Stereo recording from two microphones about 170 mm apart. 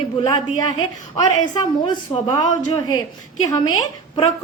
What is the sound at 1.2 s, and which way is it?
A woman's voice, 25° left (ahead or behind).